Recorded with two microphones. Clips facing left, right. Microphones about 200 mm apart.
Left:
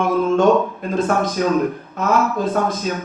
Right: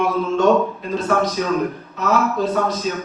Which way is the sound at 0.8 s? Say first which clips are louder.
Left 1 dB; 50° left (ahead or behind).